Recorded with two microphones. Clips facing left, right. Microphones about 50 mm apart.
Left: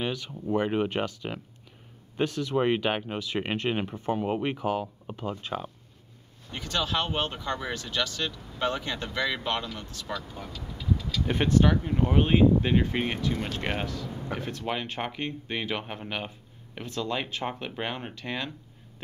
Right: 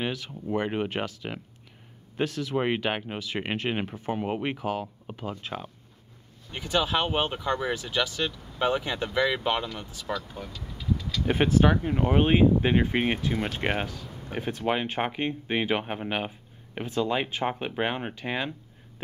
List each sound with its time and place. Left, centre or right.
0.0 s speech: centre
6.5 s speech: centre
10.1 s speech: centre
11.2 s speech: centre